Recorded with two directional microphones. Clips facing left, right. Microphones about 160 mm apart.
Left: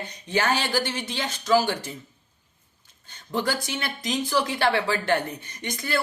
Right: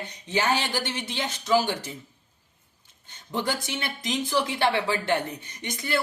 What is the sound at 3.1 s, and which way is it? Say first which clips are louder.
Speech: left 2 dB; 20° right (ahead or behind).